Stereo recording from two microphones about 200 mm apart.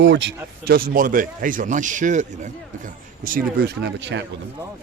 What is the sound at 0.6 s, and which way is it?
Speech, 50° right (ahead or behind).